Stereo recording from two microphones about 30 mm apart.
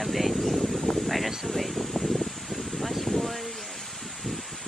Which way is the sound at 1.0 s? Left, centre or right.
Centre.